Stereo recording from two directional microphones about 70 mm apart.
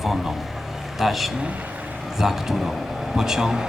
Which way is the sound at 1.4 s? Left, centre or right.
Centre.